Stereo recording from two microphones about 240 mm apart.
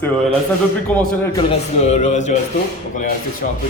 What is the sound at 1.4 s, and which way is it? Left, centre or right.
Speech, left.